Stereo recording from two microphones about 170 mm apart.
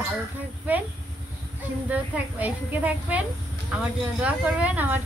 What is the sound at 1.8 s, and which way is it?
Speech, 10° right (ahead or behind).